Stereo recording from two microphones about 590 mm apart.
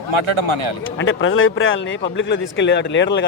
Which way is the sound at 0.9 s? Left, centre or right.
Centre.